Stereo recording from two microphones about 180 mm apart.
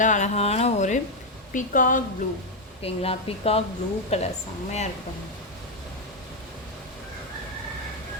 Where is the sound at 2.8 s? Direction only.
35° left (ahead or behind).